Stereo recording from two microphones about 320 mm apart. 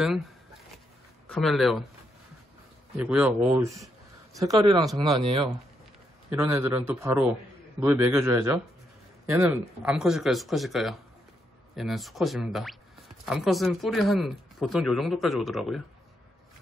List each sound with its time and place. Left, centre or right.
1.3 s speech: centre
3.0 s speech: centre